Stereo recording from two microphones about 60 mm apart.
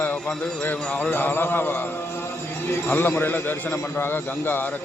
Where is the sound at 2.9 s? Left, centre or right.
Left.